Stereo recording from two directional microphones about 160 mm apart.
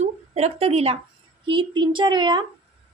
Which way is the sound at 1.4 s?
30° right (ahead or behind).